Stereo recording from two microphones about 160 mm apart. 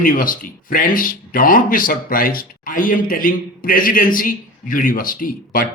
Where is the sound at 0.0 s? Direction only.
60° left (ahead or behind).